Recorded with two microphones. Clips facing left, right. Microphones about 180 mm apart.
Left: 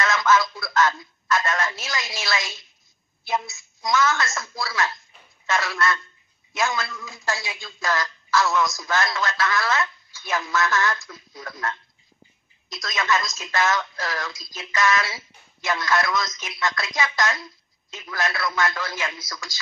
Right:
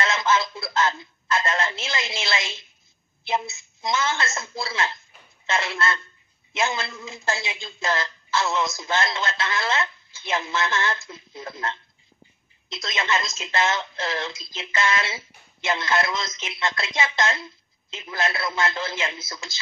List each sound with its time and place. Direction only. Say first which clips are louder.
0.0 s speech: left 2 dB; 25° right (ahead or behind)